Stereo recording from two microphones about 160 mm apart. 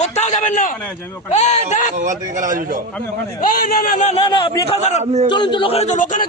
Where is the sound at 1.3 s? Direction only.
45° left (ahead or behind).